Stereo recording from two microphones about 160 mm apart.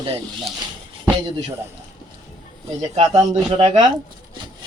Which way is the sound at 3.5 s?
30° right (ahead or behind).